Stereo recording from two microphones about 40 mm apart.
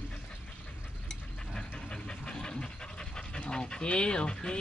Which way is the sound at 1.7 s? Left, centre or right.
Left.